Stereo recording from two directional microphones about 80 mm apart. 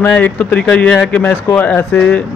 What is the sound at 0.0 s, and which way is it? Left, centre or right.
A man's voice, centre.